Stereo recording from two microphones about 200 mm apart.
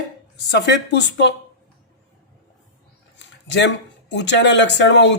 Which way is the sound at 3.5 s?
60° left (ahead or behind).